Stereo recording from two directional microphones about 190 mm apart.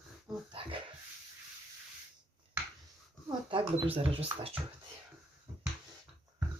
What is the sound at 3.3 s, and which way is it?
Speech, 30° right (ahead or behind).